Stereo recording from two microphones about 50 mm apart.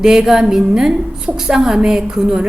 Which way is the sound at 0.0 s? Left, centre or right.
Centre.